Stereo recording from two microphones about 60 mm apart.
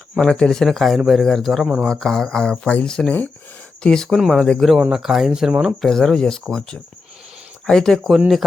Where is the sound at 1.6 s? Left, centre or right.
Centre.